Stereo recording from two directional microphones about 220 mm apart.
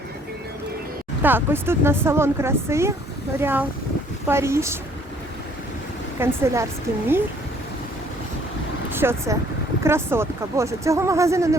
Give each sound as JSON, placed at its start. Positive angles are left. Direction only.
{"t": 1.2, "sound": "speech", "side_deg": -10}
{"t": 6.1, "sound": "speech", "side_deg": -10}
{"t": 8.9, "sound": "speech", "side_deg": -10}